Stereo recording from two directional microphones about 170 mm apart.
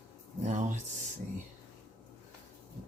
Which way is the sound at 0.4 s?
45° right (ahead or behind).